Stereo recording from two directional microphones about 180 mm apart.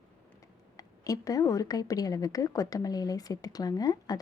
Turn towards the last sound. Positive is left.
turn(degrees=20)  # may be behind; listen again after turning